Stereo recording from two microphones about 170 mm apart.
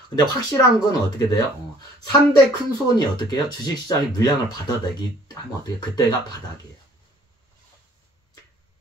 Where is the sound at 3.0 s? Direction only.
25° left (ahead or behind).